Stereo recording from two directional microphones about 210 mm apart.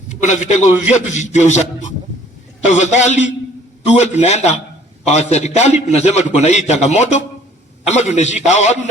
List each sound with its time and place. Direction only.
0.1 s a man's voice: 35° left (ahead or behind)